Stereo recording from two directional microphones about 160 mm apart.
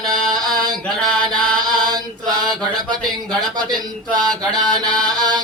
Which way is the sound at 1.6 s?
25° right (ahead or behind).